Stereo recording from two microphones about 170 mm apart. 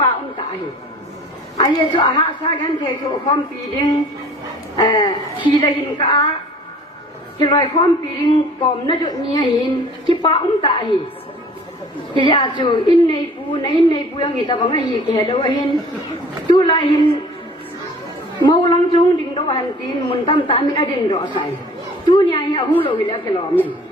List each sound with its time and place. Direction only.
1.5 s a woman's voice: 30° left (ahead or behind)
7.3 s a woman's voice: 30° left (ahead or behind)
12.1 s a woman's voice: 30° left (ahead or behind)
16.6 s a woman's voice: 25° left (ahead or behind)
18.4 s a woman's voice: 25° left (ahead or behind)